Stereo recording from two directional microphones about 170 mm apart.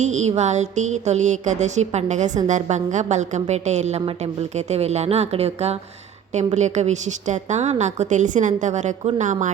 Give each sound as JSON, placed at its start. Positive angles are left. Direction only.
{"t": 0.0, "sound": "a woman's voice", "side_deg": -45}